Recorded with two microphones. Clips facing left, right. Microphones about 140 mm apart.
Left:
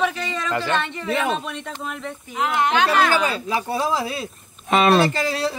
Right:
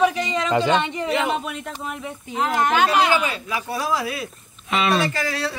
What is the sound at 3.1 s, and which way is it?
Speech, 35° left (ahead or behind).